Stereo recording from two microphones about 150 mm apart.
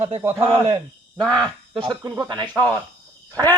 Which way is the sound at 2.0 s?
25° right (ahead or behind).